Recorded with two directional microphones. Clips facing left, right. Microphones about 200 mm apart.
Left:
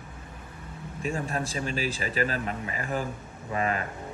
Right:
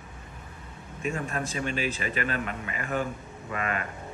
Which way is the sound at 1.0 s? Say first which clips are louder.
Left 1 dB; 35° left (ahead or behind).